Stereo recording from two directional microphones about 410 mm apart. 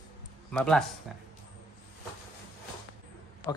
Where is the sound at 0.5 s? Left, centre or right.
Centre.